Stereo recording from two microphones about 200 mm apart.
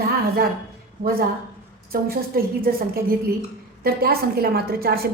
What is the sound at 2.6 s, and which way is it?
A woman's voice, 50° right (ahead or behind).